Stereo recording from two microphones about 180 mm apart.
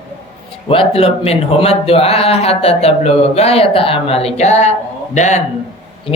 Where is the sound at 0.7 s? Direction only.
30° left (ahead or behind).